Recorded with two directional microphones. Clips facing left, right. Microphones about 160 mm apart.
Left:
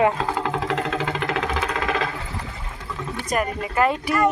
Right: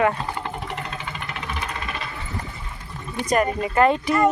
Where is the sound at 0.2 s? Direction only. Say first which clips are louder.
Left 5 dB; 90° left.